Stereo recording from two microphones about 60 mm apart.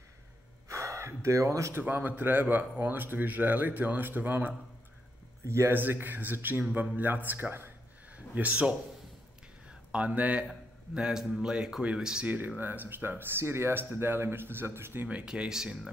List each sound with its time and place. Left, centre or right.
0.7 s gasp: right
1.8 s a man's voice: right
5.7 s a man's voice: right
8.4 s a man's voice: right
9.7 s a sound: centre
11.0 s speech: centre
12.5 s a man's voice: right
15.0 s speech: centre